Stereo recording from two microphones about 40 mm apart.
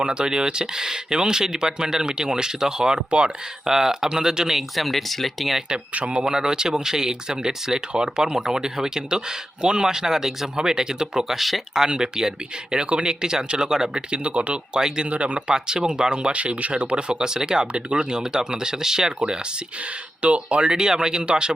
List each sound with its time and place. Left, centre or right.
0.0 s speech: right
3.7 s speech: centre
4.7 s speech: centre
5.9 s speech: right
6.2 s speech: centre
11.3 s speech: centre
11.9 s speech: centre
14.8 s speech: centre
15.1 s speech: right
15.4 s speech: centre
20.2 s speech: right